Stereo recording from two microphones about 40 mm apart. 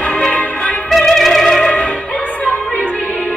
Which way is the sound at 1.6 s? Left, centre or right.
Left.